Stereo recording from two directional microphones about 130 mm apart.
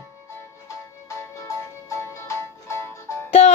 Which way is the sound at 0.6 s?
20° left (ahead or behind).